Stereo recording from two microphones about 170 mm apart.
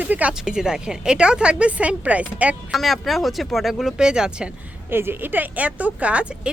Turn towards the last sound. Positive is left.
turn(degrees=-5)  # may be behind; listen again after turning